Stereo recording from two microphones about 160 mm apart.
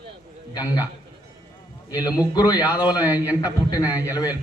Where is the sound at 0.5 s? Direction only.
25° left (ahead or behind).